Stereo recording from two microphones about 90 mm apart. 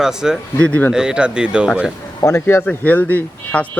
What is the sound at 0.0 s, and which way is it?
Speech, 5° right (ahead or behind).